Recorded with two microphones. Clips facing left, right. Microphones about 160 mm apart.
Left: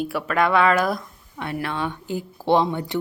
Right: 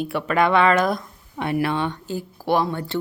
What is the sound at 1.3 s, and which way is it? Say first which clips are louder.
Speech: right 5 dB; 15° right (ahead or behind).